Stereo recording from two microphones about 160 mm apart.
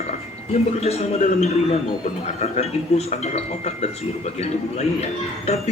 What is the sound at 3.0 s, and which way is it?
Speech, 40° left (ahead or behind).